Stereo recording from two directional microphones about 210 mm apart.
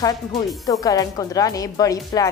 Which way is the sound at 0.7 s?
15° left (ahead or behind).